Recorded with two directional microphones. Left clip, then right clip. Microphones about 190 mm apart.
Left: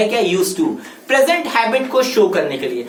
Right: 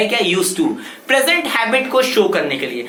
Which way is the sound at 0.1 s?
10° right (ahead or behind).